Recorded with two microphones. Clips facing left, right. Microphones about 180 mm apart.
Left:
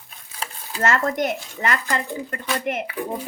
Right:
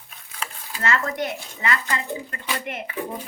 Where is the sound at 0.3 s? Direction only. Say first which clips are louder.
Left 4 dB; 45° left (ahead or behind).